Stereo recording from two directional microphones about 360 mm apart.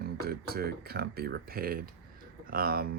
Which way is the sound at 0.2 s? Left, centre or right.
Right.